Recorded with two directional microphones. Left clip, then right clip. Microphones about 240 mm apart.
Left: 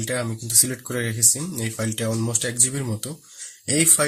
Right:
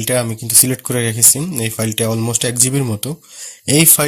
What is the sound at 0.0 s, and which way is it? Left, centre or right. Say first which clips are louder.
Speech: right 9 dB; right.